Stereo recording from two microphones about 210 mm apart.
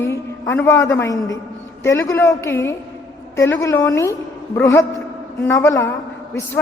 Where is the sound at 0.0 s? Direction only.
15° left (ahead or behind).